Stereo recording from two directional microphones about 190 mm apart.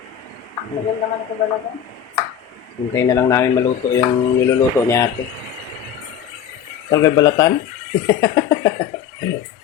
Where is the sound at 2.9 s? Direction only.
15° left (ahead or behind).